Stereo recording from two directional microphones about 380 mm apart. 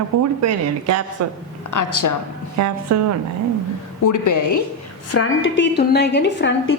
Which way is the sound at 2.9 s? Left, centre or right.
Right.